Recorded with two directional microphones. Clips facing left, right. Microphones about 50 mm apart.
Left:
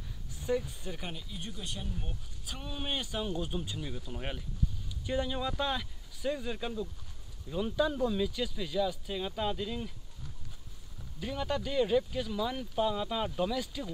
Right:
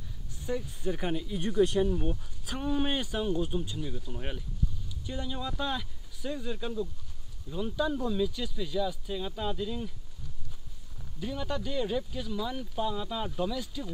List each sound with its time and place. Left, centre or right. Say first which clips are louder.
0.5 s speech: left 2 dB; centre
0.8 s speech: right 9 dB; centre
1.2 s speech: right 16 dB; right
1.9 s speech: right 11 dB; right
3.2 s speech: right 5 dB; centre
11.1 s speech: even; centre